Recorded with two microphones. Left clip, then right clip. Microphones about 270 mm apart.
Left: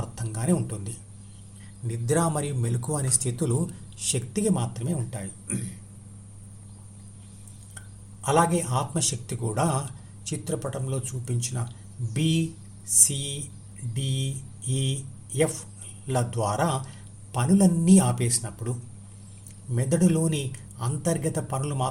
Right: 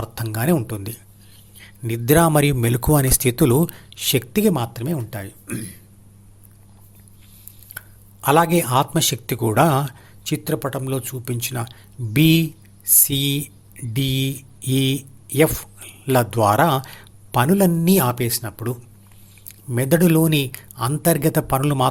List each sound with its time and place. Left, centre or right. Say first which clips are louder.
0.0 s speech: right 9 dB; right
7.7 s speech: right 11 dB; right